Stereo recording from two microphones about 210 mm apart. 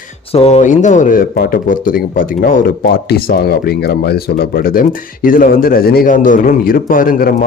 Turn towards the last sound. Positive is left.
turn(degrees=40)  # may be behind; listen again after turning